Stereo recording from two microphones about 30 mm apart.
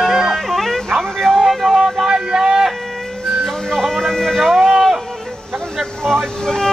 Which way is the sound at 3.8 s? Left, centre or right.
Centre.